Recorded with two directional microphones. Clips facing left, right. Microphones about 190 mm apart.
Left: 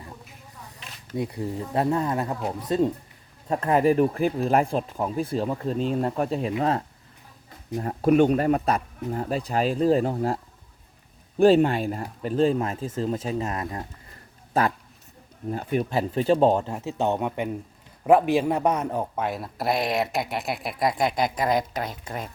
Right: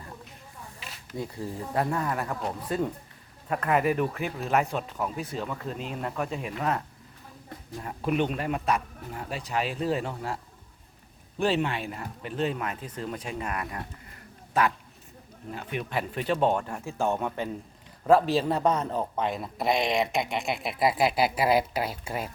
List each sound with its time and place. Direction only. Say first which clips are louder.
1.1 s speech: left 5 dB; 20° left (ahead or behind)
7.8 s speech: left 8 dB; 40° left (ahead or behind); by 13.8 s 25° left (ahead or behind)
15.5 s speech: left 6 dB; 40° left (ahead or behind); by 22.3 s 10° right (ahead or behind)